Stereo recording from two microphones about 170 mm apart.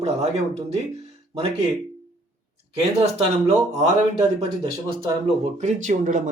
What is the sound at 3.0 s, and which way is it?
Speech, 40° right (ahead or behind).